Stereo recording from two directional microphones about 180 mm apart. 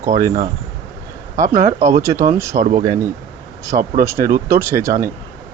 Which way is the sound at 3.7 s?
35° right (ahead or behind).